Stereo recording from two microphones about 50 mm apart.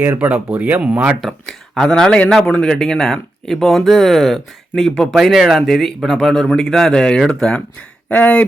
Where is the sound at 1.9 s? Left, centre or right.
Centre.